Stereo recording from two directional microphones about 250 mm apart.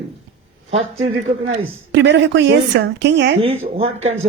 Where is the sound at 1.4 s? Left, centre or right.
Right.